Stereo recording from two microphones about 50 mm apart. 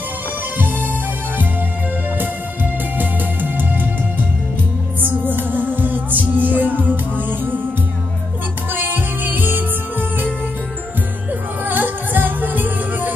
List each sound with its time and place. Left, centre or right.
2.1 s music: right
5.0 s music: right
8.7 s music: right
11.6 s music: right